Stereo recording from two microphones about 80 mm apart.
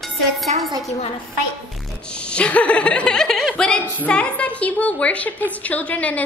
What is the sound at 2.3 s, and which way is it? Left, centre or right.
A woman's voice, centre.